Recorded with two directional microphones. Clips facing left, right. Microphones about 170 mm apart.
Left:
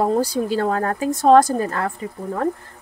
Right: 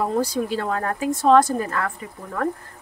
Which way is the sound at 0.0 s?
30° left (ahead or behind).